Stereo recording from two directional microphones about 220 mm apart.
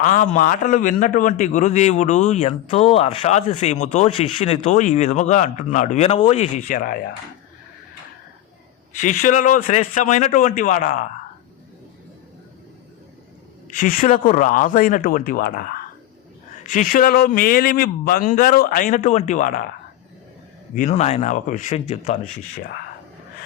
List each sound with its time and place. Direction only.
0.0 s a man's voice: 35° left (ahead or behind)
9.0 s a man's voice: 35° left (ahead or behind)
13.7 s a man's voice: 35° left (ahead or behind)
20.9 s a man's voice: 30° left (ahead or behind)